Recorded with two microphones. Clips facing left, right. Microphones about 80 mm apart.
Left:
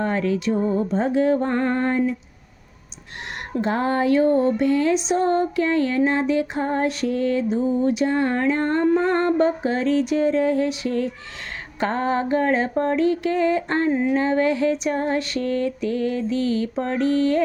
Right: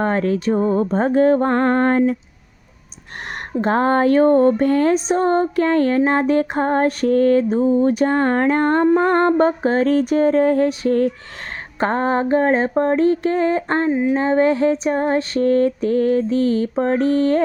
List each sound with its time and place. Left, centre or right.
0.0 s lullaby: right
3.6 s lullaby: right
11.8 s female singing: right